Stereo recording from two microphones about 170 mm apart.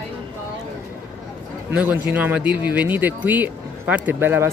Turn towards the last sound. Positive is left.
turn(degrees=-15)  # may be behind; listen again after turning